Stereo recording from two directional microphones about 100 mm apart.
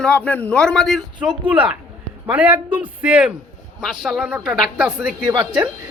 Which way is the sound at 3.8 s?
Centre (ahead or behind).